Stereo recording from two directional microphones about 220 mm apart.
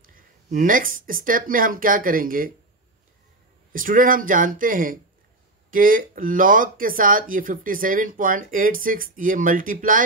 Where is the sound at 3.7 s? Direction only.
40° right (ahead or behind).